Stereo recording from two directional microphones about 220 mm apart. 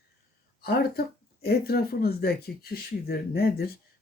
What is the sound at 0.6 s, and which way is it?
Speech, 45° left (ahead or behind).